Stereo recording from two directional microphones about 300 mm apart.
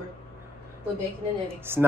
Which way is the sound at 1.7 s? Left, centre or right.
Centre.